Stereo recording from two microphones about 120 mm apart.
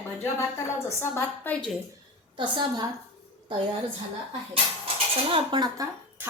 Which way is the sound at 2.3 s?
40° right (ahead or behind).